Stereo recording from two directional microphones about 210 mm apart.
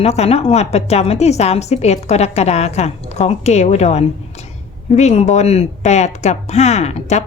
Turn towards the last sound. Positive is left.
turn(degrees=30)  # may be behind; listen again after turning